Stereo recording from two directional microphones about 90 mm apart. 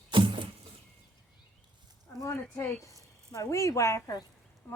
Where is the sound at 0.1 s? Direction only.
70° right (ahead or behind).